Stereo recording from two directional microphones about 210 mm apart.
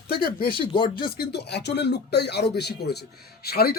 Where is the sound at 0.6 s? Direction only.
25° left (ahead or behind).